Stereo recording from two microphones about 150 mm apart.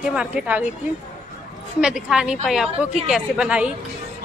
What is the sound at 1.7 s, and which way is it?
A woman's voice, 5° right (ahead or behind).